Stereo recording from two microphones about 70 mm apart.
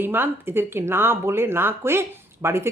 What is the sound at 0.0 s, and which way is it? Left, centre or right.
Speech, right.